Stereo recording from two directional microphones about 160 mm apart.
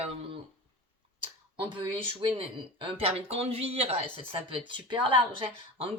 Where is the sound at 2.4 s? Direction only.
35° right (ahead or behind).